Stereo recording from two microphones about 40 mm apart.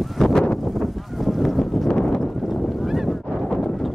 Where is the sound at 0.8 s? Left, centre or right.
Centre.